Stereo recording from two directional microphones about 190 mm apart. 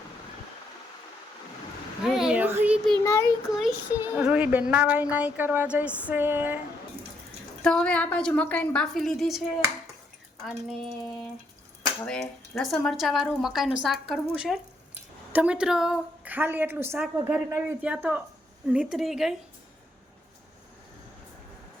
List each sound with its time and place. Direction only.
2.0 s a sound: 5° right (ahead or behind)
3.0 s child singing: 15° left (ahead or behind)
3.6 s a woman's voice: 10° right (ahead or behind)
7.6 s a woman's voice: 5° left (ahead or behind)
10.4 s a woman's voice: centre (ahead or behind)